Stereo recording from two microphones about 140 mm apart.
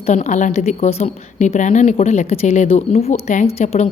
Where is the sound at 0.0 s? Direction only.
55° left (ahead or behind).